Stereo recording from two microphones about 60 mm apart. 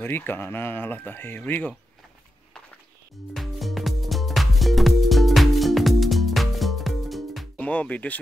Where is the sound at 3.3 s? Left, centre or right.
Centre.